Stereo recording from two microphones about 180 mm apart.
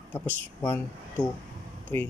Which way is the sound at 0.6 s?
10° left (ahead or behind).